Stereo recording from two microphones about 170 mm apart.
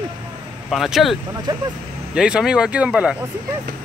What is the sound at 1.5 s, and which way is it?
Speech, 25° right (ahead or behind).